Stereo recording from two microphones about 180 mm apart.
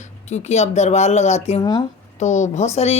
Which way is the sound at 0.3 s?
40° left (ahead or behind).